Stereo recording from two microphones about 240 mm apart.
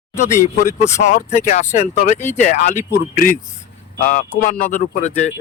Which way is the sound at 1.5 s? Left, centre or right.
Left.